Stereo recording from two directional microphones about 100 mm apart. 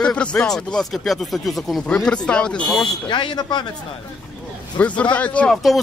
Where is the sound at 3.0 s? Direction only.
55° left (ahead or behind).